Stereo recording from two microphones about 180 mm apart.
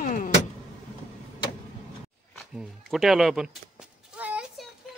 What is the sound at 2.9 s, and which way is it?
Speech, centre (ahead or behind).